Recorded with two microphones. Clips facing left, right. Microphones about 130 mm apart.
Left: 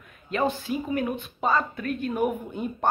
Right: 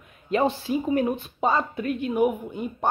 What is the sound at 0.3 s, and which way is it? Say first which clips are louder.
A woman's voice: right 3 dB; 30° right (ahead or behind).